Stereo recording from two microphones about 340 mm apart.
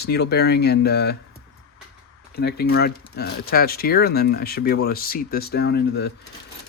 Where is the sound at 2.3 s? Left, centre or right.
Left.